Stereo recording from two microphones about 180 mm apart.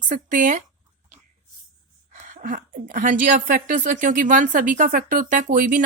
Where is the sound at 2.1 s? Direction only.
45° right (ahead or behind).